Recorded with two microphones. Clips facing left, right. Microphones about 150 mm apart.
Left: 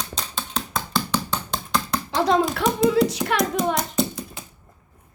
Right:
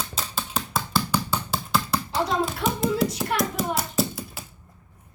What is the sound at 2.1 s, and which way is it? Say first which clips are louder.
Hands: left 7 dB; 90° left.